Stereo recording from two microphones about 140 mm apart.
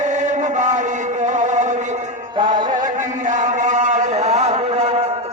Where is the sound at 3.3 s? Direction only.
60° right (ahead or behind).